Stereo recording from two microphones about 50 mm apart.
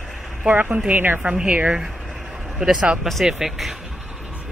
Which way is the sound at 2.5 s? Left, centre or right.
Centre.